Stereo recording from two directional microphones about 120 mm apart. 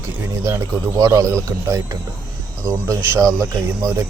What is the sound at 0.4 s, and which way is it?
Speech, 25° right (ahead or behind).